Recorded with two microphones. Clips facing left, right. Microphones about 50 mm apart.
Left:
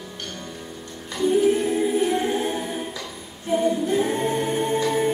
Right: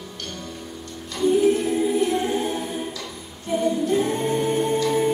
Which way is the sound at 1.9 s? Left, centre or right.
Centre.